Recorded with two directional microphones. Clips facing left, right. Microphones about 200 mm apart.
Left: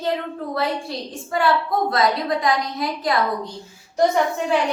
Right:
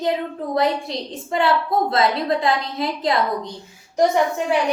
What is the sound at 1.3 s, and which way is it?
A woman's voice, 25° right (ahead or behind).